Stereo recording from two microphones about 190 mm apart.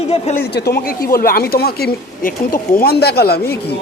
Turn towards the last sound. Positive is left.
turn(degrees=55)  # may be behind; listen again after turning